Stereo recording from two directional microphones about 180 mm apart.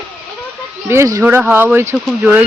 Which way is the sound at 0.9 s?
15° right (ahead or behind).